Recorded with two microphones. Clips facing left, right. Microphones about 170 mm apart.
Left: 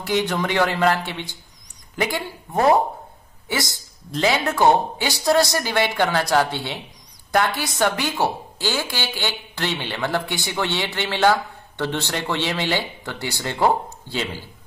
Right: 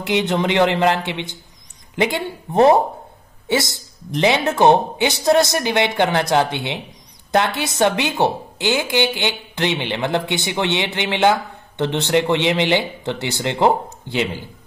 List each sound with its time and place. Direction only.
0.0 s a woman's voice: 20° right (ahead or behind)